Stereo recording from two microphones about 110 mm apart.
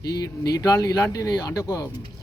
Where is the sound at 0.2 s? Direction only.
35° left (ahead or behind).